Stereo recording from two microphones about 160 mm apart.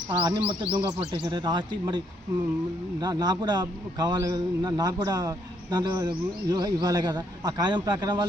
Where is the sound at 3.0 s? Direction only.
25° right (ahead or behind).